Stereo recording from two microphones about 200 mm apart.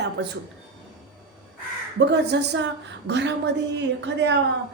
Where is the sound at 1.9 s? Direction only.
60° right (ahead or behind).